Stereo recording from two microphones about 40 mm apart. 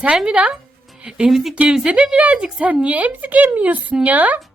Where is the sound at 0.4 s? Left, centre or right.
Right.